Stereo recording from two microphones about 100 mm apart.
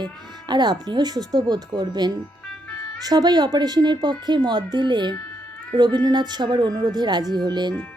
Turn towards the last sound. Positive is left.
turn(degrees=-45)  # may be behind; listen again after turning